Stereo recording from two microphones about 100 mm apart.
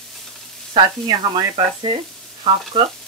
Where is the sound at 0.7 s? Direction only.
45° right (ahead or behind).